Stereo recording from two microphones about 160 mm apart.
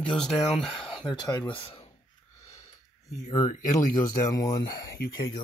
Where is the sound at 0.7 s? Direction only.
30° left (ahead or behind).